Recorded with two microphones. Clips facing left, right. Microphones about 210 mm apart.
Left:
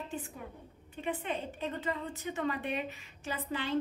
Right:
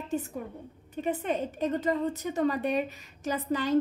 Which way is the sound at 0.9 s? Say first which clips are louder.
Right 6 dB; 40° right (ahead or behind).